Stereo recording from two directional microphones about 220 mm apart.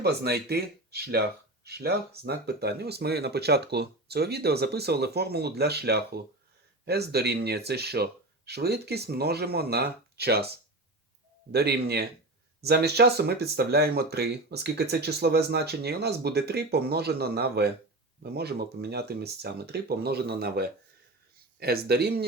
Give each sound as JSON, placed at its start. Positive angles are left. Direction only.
{"t": 0.0, "sound": "speech", "side_deg": -45}
{"t": 11.5, "sound": "speech", "side_deg": -45}